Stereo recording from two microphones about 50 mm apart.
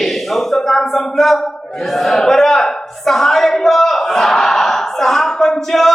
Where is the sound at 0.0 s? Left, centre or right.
Centre.